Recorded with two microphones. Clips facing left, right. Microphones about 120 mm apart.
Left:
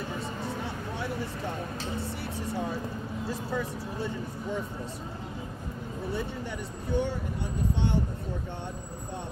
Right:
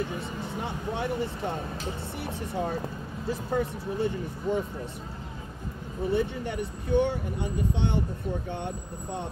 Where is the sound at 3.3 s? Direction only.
60° right (ahead or behind).